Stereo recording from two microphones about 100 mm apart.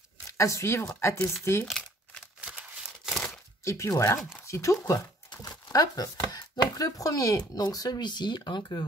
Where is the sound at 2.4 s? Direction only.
10° right (ahead or behind).